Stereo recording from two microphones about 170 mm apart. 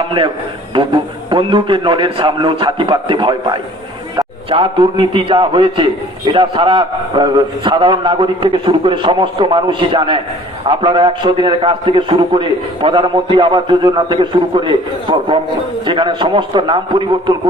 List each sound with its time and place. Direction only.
0.7 s a man's voice: 30° right (ahead or behind)